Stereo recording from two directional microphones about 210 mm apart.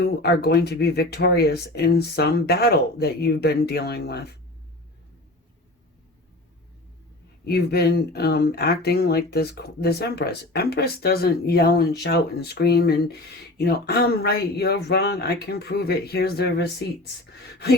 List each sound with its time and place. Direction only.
0.0 s speech: 50° left (ahead or behind)
7.4 s speech: 50° left (ahead or behind)